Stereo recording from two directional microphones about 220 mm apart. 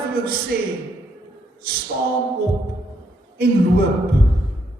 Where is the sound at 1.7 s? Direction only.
45° right (ahead or behind).